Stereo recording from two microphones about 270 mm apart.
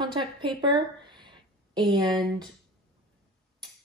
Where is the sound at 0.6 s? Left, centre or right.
Centre.